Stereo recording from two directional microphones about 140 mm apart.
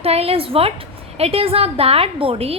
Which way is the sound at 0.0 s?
45° right (ahead or behind).